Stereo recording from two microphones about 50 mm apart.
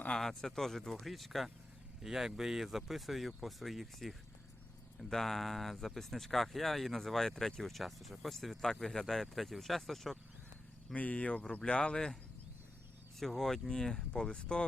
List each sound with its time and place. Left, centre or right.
0.2 s speech: centre
10.9 s speech: left
13.1 s speech: centre